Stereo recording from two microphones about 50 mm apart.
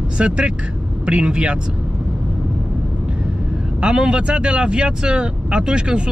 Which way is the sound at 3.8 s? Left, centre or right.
Centre.